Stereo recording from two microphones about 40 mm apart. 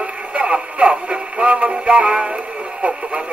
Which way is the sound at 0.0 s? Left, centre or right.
Right.